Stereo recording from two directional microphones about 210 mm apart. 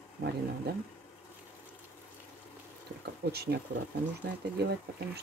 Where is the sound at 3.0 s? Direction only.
50° right (ahead or behind).